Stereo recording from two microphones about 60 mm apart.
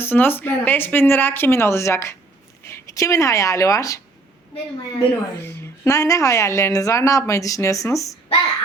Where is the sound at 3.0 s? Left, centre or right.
Left.